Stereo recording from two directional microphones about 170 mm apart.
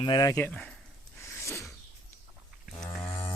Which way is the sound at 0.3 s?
10° left (ahead or behind).